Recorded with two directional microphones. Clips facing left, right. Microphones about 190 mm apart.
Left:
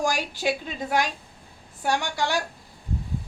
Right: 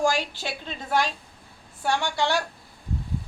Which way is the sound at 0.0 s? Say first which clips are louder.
Even; 15° left (ahead or behind).